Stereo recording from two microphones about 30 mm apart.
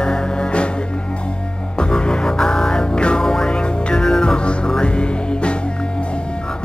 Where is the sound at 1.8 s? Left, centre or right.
Left.